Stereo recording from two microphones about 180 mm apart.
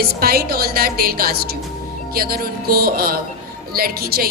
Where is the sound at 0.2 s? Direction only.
55° right (ahead or behind).